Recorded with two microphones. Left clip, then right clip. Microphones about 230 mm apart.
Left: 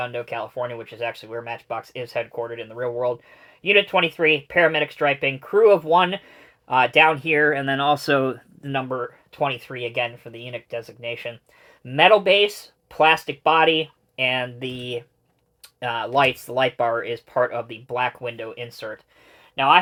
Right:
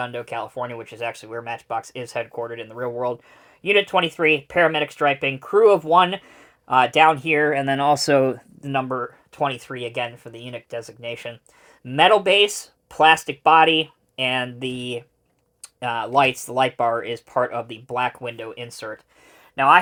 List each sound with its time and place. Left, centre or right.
0.0 s speech: right